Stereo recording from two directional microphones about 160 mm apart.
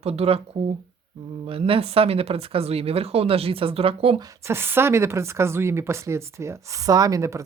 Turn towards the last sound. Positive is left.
turn(degrees=-20)  # may be behind; listen again after turning